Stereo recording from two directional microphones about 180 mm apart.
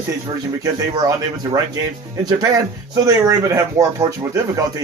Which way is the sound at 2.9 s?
15° right (ahead or behind).